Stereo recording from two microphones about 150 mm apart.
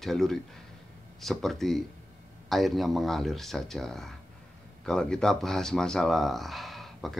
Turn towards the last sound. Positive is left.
turn(degrees=0)  # may be behind; listen again after turning